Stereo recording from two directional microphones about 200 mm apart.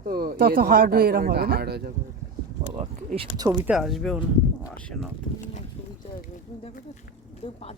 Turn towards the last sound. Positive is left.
turn(degrees=30)  # may be behind; listen again after turning